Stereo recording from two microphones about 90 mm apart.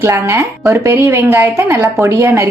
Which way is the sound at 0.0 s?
25° right (ahead or behind).